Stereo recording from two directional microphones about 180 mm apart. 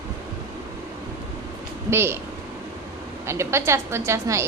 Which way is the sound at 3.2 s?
15° right (ahead or behind).